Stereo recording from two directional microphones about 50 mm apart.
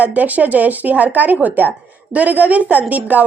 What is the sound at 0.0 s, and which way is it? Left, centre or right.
A woman's voice, right.